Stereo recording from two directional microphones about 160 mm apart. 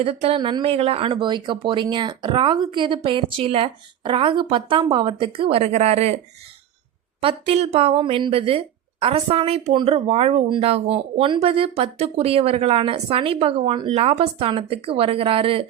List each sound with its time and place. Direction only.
0.0 s speech: 35° right (ahead or behind)
7.2 s speech: 35° right (ahead or behind)